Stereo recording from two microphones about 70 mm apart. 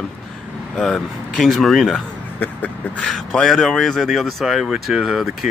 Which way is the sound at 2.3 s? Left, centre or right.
Left.